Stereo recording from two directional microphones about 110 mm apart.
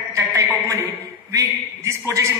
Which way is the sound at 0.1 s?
30° right (ahead or behind).